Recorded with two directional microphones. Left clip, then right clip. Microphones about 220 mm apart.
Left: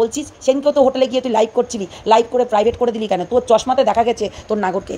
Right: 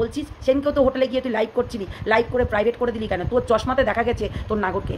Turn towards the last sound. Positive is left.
turn(degrees=20)  # may be behind; listen again after turning